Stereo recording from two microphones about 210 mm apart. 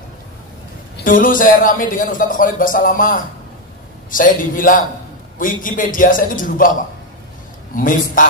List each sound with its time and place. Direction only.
0.9 s a man's voice: 40° left (ahead or behind)
7.7 s a man's voice: 40° left (ahead or behind)